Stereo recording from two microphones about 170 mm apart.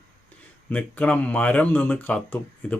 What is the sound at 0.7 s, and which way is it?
Speech, 10° left (ahead or behind).